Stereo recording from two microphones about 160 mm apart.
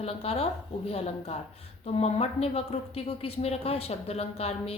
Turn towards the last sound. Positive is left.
turn(degrees=40)  # may be behind; listen again after turning